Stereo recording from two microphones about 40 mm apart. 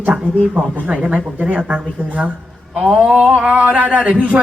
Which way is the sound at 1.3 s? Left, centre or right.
Right.